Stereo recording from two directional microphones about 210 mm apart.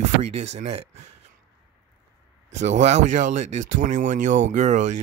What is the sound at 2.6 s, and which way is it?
Speech, 35° right (ahead or behind).